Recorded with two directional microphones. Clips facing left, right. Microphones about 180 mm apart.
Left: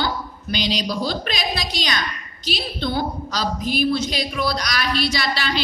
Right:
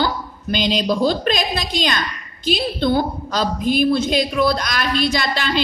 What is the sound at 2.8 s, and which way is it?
A woman's voice, 50° right (ahead or behind).